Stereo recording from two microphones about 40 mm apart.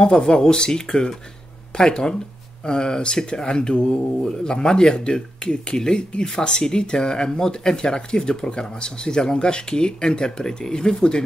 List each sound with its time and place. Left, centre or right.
0.0 s speech: centre